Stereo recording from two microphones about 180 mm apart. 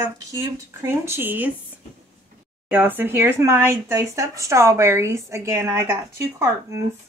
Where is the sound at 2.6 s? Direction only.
10° right (ahead or behind).